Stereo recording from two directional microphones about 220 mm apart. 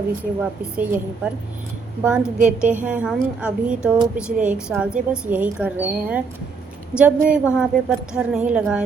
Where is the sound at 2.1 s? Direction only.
5° right (ahead or behind).